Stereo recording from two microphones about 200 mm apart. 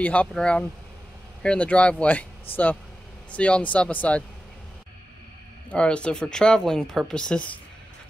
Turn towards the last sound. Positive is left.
turn(degrees=5)  # may be behind; listen again after turning